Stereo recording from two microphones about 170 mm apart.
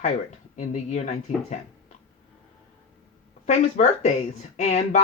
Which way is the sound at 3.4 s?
45° left (ahead or behind).